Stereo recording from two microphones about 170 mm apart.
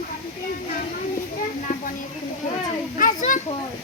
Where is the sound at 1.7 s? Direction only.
50° left (ahead or behind).